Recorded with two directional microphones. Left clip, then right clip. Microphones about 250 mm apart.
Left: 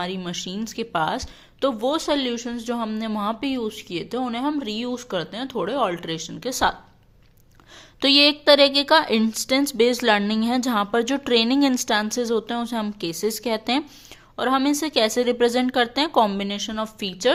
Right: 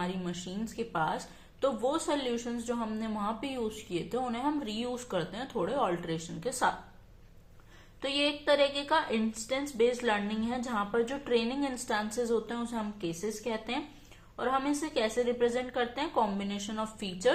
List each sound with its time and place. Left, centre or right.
0.0 s speech: left
7.9 s a woman's voice: left